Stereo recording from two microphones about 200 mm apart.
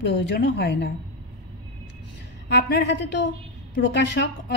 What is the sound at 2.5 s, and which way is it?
A woman's voice, 55° left (ahead or behind).